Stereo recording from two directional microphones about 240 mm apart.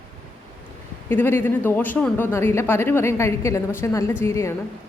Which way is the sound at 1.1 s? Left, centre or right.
Centre.